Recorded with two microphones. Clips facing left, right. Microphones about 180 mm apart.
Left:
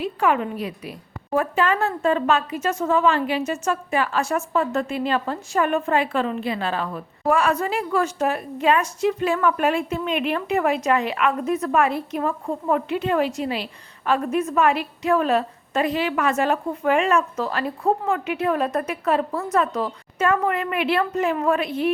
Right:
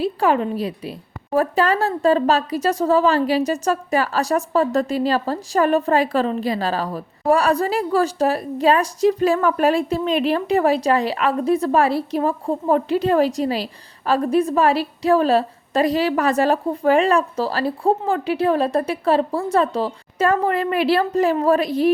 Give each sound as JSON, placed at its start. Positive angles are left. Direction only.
{"t": 0.0, "sound": "speech", "side_deg": -35}